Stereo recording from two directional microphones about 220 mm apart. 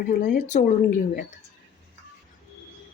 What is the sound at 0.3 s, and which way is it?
Speech, 35° left (ahead or behind).